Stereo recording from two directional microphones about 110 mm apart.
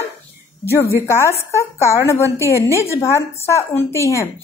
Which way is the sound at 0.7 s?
25° left (ahead or behind).